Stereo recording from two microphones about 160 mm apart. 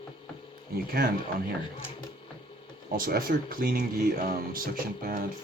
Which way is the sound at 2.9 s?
65° right (ahead or behind).